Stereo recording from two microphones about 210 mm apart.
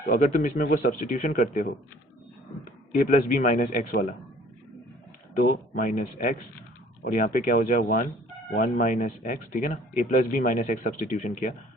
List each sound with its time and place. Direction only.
0.0 s speech: 35° left (ahead or behind)
3.1 s speech: 35° left (ahead or behind)
5.4 s speech: 40° left (ahead or behind)